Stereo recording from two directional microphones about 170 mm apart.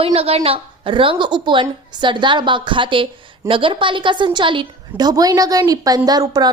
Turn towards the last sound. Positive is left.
turn(degrees=-20)  # may be behind; listen again after turning